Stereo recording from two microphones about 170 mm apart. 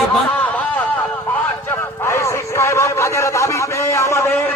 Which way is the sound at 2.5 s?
15° left (ahead or behind).